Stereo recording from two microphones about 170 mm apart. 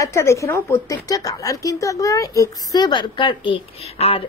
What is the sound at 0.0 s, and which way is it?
A woman's voice, 15° left (ahead or behind).